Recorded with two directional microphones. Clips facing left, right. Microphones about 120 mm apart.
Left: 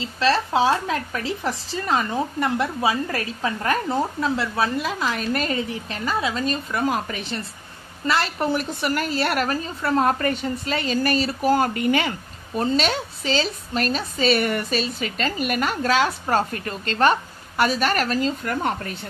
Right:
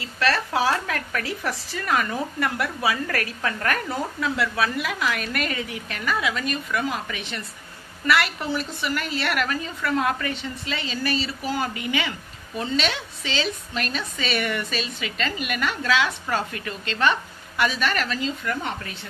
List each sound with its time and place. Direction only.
0.0 s a woman's voice: 25° left (ahead or behind)
8.4 s a woman's voice: 50° left (ahead or behind)